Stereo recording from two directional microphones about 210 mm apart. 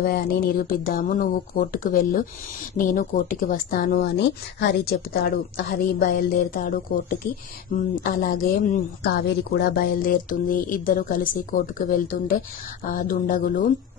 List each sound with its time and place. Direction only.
0.0 s speech: 45° left (ahead or behind)